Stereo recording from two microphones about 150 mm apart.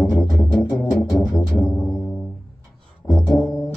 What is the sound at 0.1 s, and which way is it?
Music, 20° left (ahead or behind).